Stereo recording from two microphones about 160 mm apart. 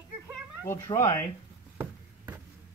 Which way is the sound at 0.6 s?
15° left (ahead or behind).